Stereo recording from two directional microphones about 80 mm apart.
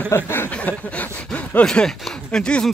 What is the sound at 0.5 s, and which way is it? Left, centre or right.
Chuckle, centre.